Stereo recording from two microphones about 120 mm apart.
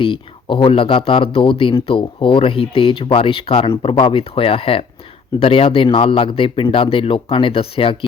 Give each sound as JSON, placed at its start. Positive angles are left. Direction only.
{"t": 0.0, "sound": "a man's voice", "side_deg": 45}